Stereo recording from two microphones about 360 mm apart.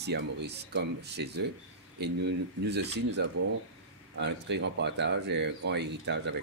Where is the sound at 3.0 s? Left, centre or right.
Right.